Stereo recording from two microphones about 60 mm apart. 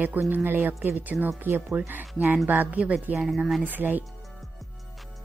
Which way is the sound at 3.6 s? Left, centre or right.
Right.